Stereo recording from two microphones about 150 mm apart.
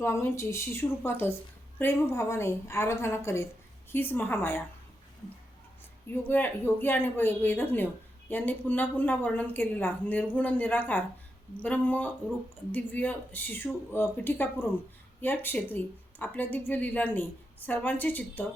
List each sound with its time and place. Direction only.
0.0 s a woman's voice: 15° left (ahead or behind)
6.2 s a woman's voice: 15° left (ahead or behind)